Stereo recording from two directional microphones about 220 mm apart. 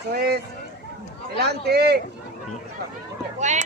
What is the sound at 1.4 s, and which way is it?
Speech, 45° right (ahead or behind).